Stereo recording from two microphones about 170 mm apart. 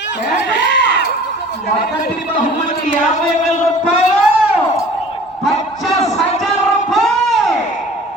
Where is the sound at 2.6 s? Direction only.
45° left (ahead or behind).